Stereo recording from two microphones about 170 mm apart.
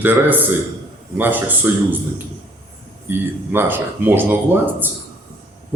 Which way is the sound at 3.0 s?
10° right (ahead or behind).